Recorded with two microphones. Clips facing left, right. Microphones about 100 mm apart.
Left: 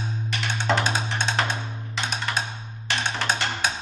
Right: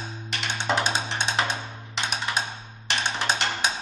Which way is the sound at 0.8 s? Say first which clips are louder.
Left 1 dB; 15° right (ahead or behind).